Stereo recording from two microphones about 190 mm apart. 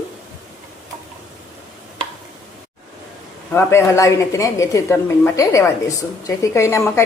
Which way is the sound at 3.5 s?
15° left (ahead or behind).